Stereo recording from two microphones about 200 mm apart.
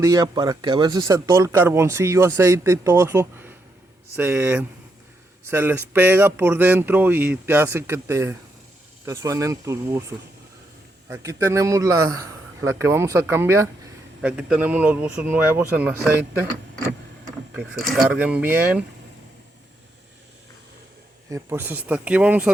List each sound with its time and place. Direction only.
0.0 s speech: 20° right (ahead or behind)
11.1 s speech: 15° right (ahead or behind)
17.5 s speech: 5° right (ahead or behind)
21.2 s speech: 15° right (ahead or behind)